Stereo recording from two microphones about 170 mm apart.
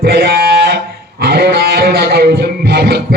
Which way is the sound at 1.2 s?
70° right (ahead or behind).